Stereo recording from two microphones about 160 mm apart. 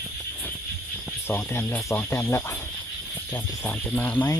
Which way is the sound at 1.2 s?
15° left (ahead or behind).